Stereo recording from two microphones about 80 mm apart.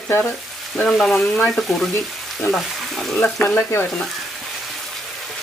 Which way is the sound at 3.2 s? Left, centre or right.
Centre.